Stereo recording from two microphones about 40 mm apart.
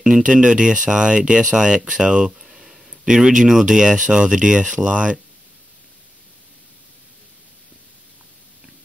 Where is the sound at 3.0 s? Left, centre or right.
Centre.